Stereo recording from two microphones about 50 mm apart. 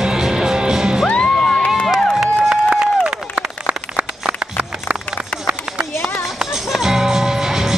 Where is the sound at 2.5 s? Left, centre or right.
Right.